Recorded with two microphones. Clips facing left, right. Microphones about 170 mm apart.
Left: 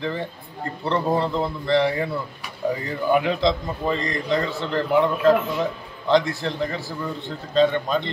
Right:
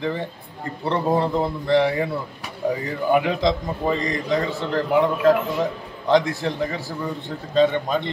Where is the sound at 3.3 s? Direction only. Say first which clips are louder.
Even; 15° right (ahead or behind).